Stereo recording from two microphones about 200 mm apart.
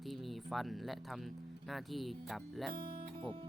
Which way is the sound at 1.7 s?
Centre (ahead or behind).